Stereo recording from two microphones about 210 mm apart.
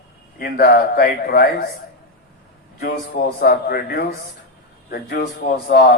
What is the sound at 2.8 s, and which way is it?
A man's voice, 45° left (ahead or behind).